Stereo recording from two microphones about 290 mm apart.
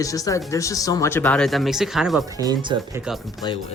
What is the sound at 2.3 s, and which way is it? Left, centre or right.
Speech, centre.